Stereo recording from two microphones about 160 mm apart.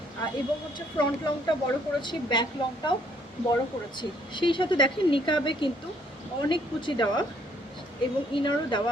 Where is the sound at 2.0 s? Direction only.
30° left (ahead or behind).